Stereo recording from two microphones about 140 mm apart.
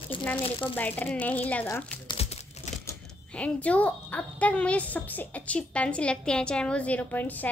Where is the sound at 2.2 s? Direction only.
50° left (ahead or behind).